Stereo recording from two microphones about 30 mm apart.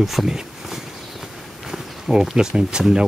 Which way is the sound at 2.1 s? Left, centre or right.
Right.